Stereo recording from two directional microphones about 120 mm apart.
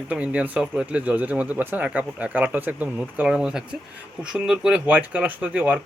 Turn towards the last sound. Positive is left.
turn(degrees=-10)  # may be behind; listen again after turning